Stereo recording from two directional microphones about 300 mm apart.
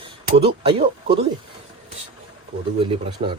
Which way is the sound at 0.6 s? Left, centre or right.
Centre.